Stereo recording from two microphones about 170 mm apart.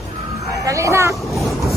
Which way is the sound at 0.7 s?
20° right (ahead or behind).